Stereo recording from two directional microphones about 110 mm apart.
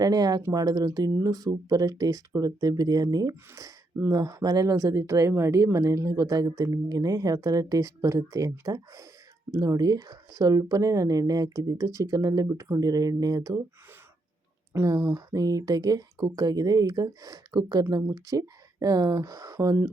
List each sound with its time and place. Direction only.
0.0 s speech: 35° right (ahead or behind)
14.7 s speech: 25° right (ahead or behind)